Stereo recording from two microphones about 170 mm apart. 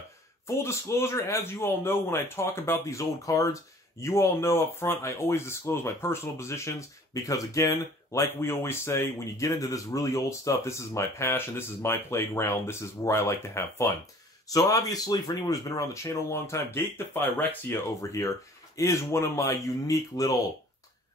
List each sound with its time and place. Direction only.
0.6 s speech: 15° left (ahead or behind)